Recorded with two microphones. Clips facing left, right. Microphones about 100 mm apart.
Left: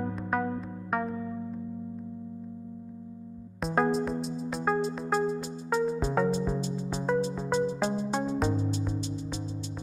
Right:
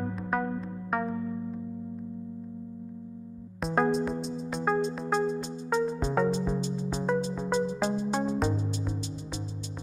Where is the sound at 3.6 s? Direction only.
Centre (ahead or behind).